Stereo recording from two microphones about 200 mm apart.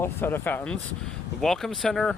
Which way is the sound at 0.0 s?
10° left (ahead or behind).